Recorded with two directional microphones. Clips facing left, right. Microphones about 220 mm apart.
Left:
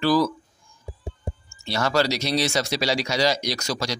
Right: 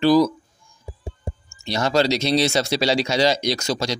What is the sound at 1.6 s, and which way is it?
Speech, 20° right (ahead or behind).